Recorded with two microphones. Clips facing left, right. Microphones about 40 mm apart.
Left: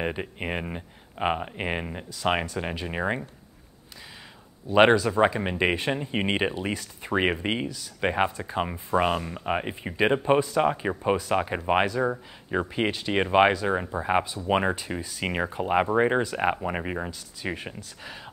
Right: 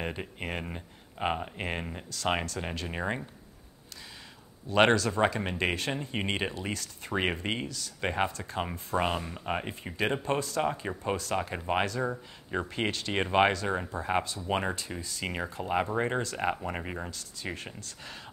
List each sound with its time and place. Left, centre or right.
0.0 s speech: centre
4.6 s speech: centre